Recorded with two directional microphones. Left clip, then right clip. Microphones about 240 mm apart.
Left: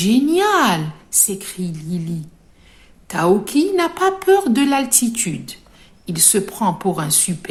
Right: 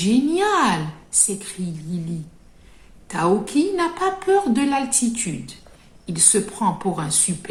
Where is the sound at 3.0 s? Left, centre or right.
Left.